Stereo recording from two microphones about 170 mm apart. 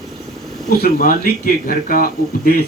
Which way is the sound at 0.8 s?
55° left (ahead or behind).